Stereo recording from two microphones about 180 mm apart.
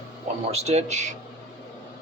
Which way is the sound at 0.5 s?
35° right (ahead or behind).